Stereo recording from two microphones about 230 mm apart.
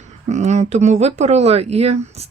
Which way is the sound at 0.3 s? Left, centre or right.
Right.